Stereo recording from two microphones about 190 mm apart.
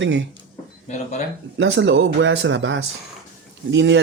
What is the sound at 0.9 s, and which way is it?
Speech, 40° left (ahead or behind).